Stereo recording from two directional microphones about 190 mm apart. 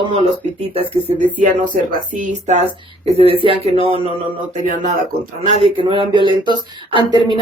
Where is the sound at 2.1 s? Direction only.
45° right (ahead or behind).